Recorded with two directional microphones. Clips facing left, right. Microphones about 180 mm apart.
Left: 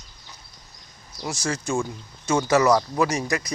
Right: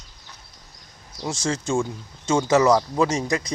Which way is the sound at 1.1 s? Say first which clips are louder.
Right 2 dB; 25° right (ahead or behind).